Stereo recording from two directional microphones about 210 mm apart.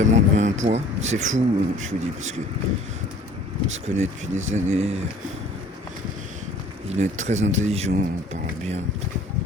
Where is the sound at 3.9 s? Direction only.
35° right (ahead or behind).